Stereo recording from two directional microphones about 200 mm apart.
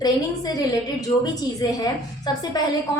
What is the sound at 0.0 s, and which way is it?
A woman's voice, 20° left (ahead or behind).